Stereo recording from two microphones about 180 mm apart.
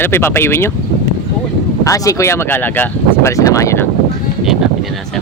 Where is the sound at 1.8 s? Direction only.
20° left (ahead or behind).